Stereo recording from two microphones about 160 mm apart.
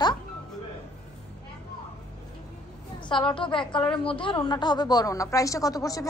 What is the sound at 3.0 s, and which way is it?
A woman's voice, 30° left (ahead or behind).